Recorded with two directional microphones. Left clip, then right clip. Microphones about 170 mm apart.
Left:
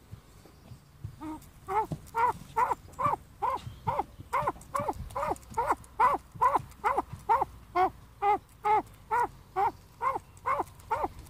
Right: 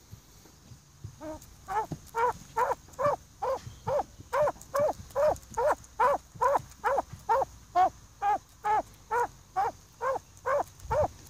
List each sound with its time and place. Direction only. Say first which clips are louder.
1.2 s livestock: even; 15° right (ahead or behind)